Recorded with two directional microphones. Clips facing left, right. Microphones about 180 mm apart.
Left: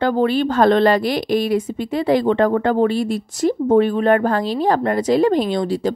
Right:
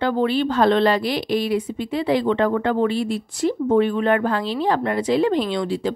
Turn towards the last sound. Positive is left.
turn(degrees=40)  # may be behind; listen again after turning